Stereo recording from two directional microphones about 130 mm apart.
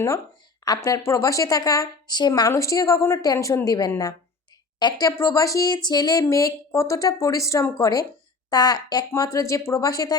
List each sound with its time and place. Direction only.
0.6 s speech: 30° left (ahead or behind)